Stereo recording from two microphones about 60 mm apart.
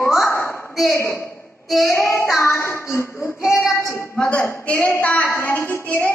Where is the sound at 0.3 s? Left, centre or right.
Left.